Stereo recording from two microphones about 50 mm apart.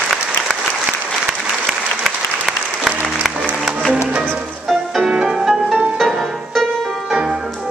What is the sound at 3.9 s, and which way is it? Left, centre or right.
Music, right.